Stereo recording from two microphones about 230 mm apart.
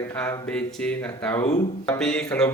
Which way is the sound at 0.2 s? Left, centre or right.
Centre.